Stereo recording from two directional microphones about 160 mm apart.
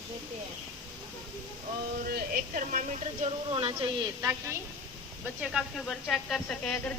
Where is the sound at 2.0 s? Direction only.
70° right (ahead or behind).